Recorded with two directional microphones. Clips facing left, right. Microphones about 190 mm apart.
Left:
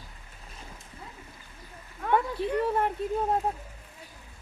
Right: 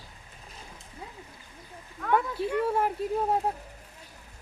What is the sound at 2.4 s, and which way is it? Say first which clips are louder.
Speech: even; centre (ahead or behind).